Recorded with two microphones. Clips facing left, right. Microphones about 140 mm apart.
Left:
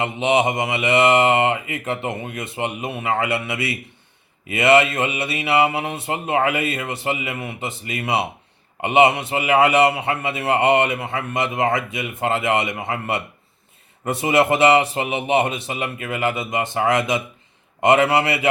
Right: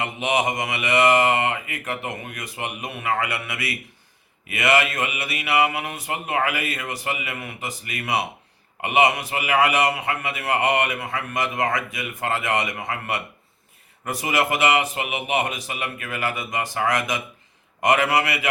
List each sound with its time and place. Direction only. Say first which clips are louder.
0.0 s a man's voice: left 5 dB; 25° left (ahead or behind)